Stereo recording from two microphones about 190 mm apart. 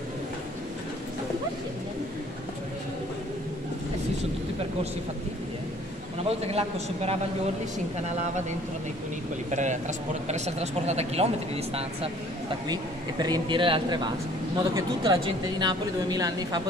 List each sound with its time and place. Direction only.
6.2 s speech: 30° right (ahead or behind)
9.5 s speech: 40° right (ahead or behind)
12.6 s speech: 20° right (ahead or behind)